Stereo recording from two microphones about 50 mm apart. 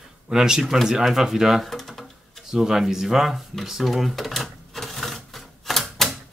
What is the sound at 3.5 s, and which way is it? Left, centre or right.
Cash register, centre.